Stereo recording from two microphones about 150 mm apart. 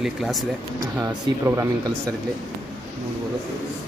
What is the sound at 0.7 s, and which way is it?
Speech, 20° right (ahead or behind).